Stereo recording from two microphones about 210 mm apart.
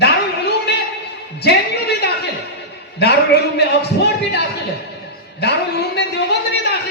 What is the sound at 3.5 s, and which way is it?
Speech, 50° left (ahead or behind).